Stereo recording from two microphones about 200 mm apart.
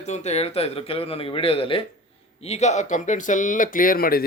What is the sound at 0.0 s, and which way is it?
A man's voice, 35° left (ahead or behind).